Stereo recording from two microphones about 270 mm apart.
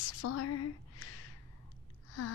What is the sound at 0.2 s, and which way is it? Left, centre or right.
Speech, left.